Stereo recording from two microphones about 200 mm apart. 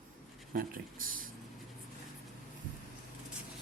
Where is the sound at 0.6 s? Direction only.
45° right (ahead or behind).